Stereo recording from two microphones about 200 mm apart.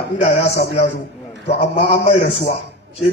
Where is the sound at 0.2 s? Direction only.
35° left (ahead or behind).